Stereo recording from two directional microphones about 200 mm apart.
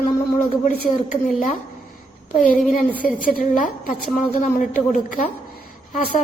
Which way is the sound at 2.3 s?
40° left (ahead or behind).